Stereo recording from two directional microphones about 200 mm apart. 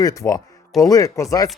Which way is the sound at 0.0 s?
15° left (ahead or behind).